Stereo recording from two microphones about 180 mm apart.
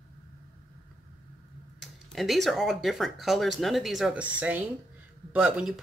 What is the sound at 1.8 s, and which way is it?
Speech, centre (ahead or behind).